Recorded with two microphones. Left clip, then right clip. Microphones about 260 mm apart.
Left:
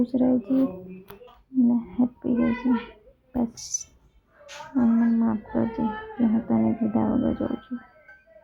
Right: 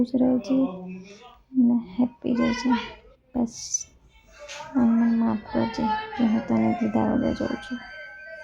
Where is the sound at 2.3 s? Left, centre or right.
Right.